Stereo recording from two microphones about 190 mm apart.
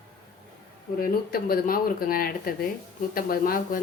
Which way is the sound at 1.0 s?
50° left (ahead or behind).